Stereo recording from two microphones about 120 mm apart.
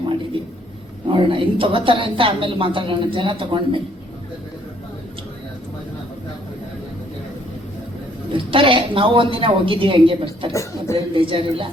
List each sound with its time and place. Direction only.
0.4 s a sound: 45° right (ahead or behind)
1.1 s a woman's voice: 45° right (ahead or behind)
8.3 s a woman's voice: 45° right (ahead or behind)
10.5 s a woman's voice: 25° left (ahead or behind)
11.1 s a woman's voice: 45° right (ahead or behind)